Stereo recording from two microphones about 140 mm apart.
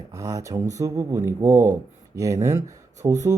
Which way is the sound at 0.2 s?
25° right (ahead or behind).